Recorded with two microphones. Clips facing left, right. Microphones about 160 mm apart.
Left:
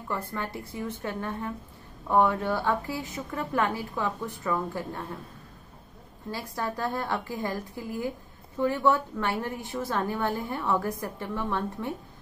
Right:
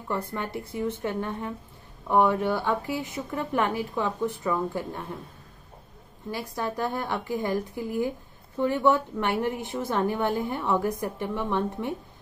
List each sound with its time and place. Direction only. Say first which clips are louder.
0.1 s a woman's voice: right 3 dB; 20° right (ahead or behind)
6.3 s a woman's voice: right 2 dB; 15° right (ahead or behind)